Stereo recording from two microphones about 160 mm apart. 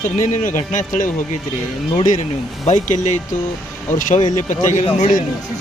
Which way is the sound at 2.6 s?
45° left (ahead or behind).